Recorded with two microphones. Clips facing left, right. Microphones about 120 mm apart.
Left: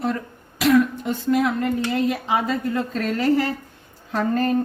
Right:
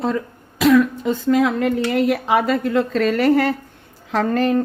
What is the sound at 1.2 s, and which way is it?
A woman's voice, 90° right.